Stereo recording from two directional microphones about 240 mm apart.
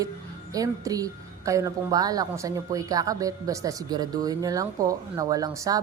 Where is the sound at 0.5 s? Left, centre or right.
Centre.